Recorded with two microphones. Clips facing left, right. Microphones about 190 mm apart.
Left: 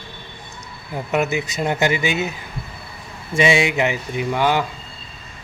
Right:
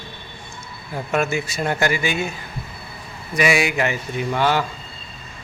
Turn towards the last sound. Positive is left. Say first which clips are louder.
# left 1 dB
turn(degrees=15)  # may be behind; listen again after turning